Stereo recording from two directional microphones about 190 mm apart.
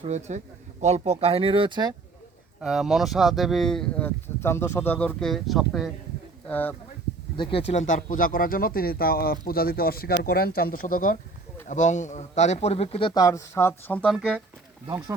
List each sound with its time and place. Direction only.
0.0 s speech: 35° right (ahead or behind)
2.6 s speech: 5° right (ahead or behind)
6.5 s speech: 10° left (ahead or behind)
7.7 s a man's voice: 40° left (ahead or behind); by 14.4 s centre (ahead or behind)